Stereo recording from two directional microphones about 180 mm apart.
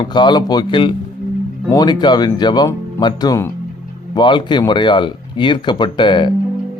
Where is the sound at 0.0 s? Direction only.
25° left (ahead or behind).